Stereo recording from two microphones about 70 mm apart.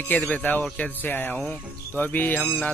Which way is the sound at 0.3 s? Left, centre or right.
Left.